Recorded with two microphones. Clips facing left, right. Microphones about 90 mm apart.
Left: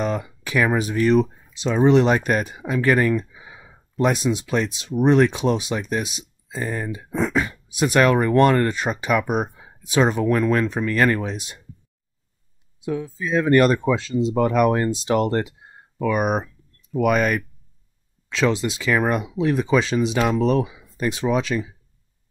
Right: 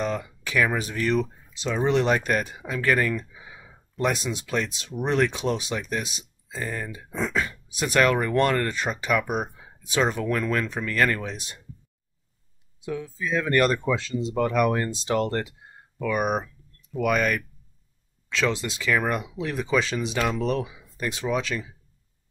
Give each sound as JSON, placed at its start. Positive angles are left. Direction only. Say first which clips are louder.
{"t": 0.0, "sound": "speech", "louder": "left 3 dB", "side_deg": 20}
{"t": 12.8, "sound": "speech", "louder": "left 4 dB", "side_deg": 25}